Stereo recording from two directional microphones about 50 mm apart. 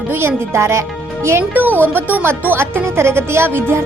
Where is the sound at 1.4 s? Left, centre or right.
Right.